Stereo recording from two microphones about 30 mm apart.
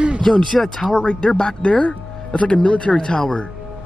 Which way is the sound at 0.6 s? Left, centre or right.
Centre.